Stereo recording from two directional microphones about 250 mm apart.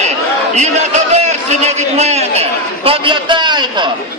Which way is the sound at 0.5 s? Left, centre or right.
Right.